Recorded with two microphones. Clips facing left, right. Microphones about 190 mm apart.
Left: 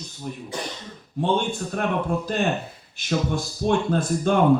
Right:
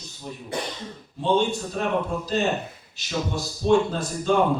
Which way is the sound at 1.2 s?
55° left (ahead or behind).